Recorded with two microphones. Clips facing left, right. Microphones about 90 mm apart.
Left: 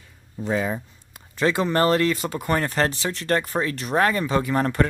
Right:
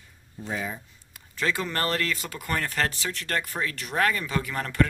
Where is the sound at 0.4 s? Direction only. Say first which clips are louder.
Left 8 dB; 90° left.